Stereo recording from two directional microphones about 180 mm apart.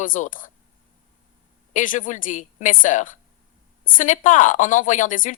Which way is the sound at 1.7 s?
45° left (ahead or behind).